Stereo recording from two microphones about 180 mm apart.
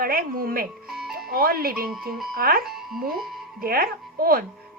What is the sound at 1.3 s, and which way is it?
A woman's voice, 55° right (ahead or behind).